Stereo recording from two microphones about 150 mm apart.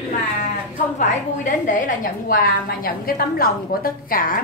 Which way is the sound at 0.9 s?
60° left (ahead or behind).